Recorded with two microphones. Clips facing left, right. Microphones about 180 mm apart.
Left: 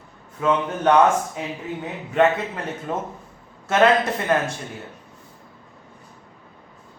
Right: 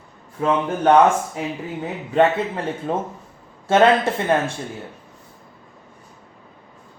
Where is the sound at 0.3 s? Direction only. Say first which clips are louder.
Right 1 dB; 30° right (ahead or behind).